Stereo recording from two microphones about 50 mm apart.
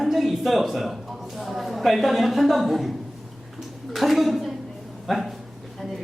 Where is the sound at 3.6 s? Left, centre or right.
Centre.